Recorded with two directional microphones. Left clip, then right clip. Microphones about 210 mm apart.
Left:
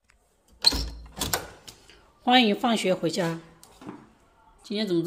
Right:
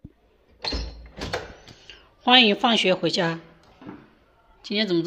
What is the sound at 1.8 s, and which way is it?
Speech, 5° left (ahead or behind).